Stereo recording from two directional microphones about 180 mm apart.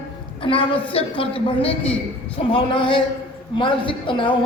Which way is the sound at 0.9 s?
30° left (ahead or behind).